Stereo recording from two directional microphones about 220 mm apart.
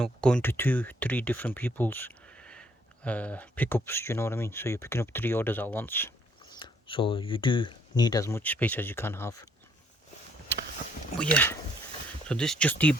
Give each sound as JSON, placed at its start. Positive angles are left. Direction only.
{"t": 0.0, "sound": "speech", "side_deg": 5}
{"t": 6.6, "sound": "speech", "side_deg": 25}
{"t": 11.2, "sound": "speech", "side_deg": 5}